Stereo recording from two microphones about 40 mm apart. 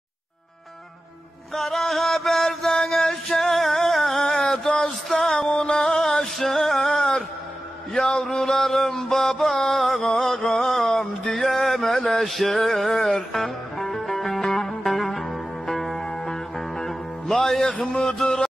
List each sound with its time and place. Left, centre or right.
1.5 s music: centre; by 6.0 s left
6.0 s music: centre
17.9 s a sound: centre